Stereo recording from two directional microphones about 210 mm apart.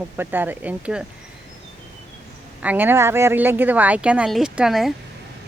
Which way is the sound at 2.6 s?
10° right (ahead or behind).